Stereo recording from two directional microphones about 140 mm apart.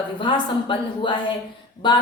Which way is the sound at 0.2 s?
35° left (ahead or behind).